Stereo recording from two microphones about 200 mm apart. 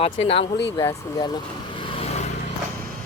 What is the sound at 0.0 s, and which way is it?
Speech, 30° left (ahead or behind).